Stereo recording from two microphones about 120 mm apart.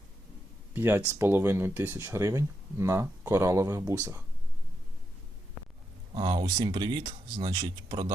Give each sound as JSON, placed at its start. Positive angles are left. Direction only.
{"t": 0.7, "sound": "speech", "side_deg": -20}
{"t": 6.1, "sound": "speech", "side_deg": -35}